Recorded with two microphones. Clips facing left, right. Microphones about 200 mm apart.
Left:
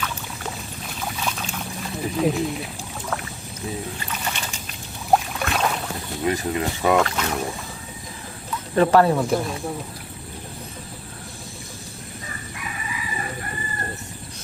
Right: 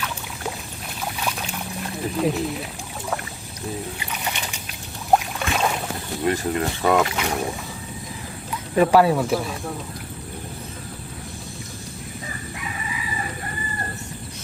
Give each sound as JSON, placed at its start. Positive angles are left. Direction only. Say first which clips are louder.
{"t": 1.1, "sound": "a sound", "louder": "even", "side_deg": -10}
{"t": 2.1, "sound": "speech", "louder": "left 1 dB", "side_deg": 0}
{"t": 4.3, "sound": "boat", "louder": "even", "side_deg": -15}
{"t": 6.2, "sound": "speech", "louder": "right 1 dB", "side_deg": 0}
{"t": 7.0, "sound": "speech", "louder": "even", "side_deg": -10}
{"t": 8.7, "sound": "speech", "louder": "even", "side_deg": -10}